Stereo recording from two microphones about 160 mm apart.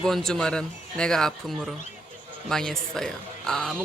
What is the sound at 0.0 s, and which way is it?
Speech, 5° left (ahead or behind).